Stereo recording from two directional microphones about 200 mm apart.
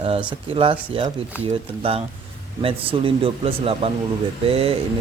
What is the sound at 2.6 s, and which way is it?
Speech, 25° right (ahead or behind).